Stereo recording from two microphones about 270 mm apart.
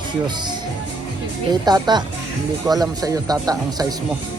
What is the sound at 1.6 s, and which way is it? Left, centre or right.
Speech, centre.